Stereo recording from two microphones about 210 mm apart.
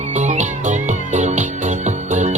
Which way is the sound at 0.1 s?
35° right (ahead or behind).